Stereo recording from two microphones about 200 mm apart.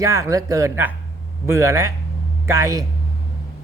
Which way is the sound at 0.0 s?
15° right (ahead or behind).